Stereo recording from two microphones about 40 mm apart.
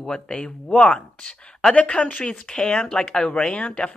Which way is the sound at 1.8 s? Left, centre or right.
Left.